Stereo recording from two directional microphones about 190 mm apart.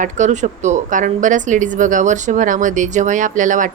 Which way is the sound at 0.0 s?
40° right (ahead or behind).